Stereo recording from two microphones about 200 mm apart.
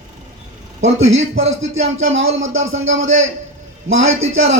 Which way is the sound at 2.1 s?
75° right (ahead or behind).